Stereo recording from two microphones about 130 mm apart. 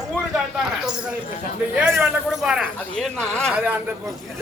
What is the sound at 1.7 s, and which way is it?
Speech, 10° right (ahead or behind).